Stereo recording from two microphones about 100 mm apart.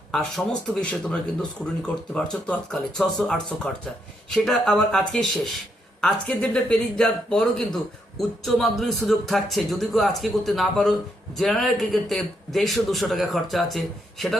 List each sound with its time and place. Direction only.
0.1 s a man's voice: 5° left (ahead or behind)